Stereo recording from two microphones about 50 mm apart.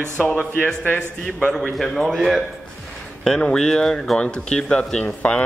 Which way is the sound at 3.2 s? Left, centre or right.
Centre.